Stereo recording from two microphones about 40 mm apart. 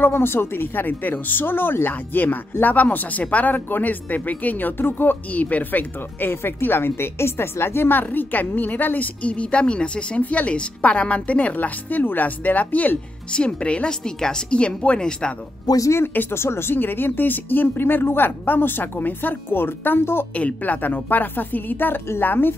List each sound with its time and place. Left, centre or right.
0.0 s a woman's voice: left
5.3 s speech: left
8.0 s speech: left
9.2 s a woman's voice: left
11.5 s speech: left
13.3 s a woman's voice: left
16.3 s speech: left
16.7 s a woman's voice: left
20.3 s speech: left
22.2 s a woman's voice: left